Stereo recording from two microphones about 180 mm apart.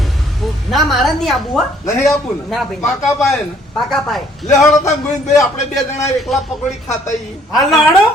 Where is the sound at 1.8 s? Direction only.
15° left (ahead or behind).